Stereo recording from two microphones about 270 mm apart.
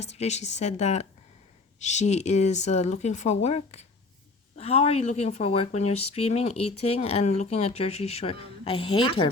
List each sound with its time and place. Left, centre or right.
0.0 s speech: left